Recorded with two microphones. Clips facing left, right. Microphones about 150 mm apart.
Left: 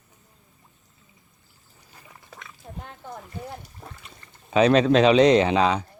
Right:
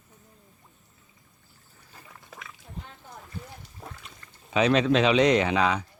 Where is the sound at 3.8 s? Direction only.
Centre (ahead or behind).